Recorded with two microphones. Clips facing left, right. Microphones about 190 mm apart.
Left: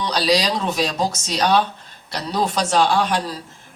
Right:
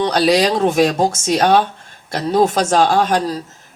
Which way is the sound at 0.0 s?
50° right (ahead or behind).